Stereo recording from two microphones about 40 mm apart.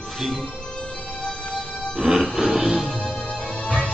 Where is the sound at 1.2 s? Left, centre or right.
Centre.